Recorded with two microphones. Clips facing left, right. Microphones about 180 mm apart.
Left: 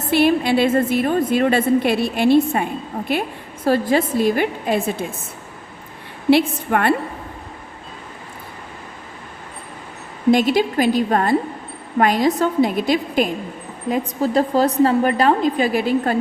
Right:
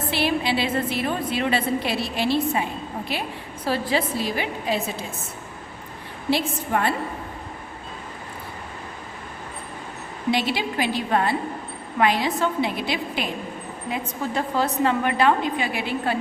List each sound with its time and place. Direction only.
0.1 s a woman's voice: 50° left (ahead or behind)
6.3 s a woman's voice: 65° left (ahead or behind)
10.3 s a woman's voice: 45° left (ahead or behind)